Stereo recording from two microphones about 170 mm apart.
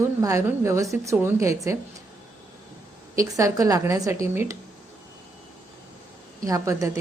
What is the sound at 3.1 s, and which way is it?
A woman's voice, 20° right (ahead or behind).